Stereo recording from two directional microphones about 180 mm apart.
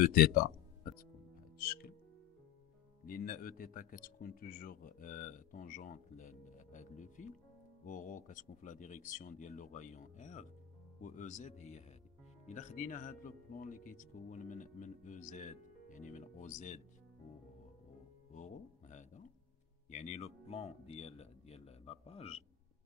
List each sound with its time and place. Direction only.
0.0 s music: 55° left (ahead or behind)
3.1 s speech: 50° left (ahead or behind)
18.3 s speech: 40° left (ahead or behind)